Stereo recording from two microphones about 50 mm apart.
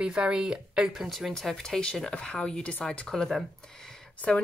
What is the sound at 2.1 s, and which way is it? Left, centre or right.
Speech, left.